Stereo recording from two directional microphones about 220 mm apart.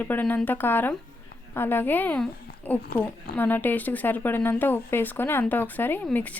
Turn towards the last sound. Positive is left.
turn(degrees=5)  # may be behind; listen again after turning